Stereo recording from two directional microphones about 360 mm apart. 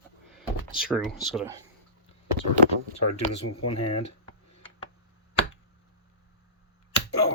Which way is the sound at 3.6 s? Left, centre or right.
Left.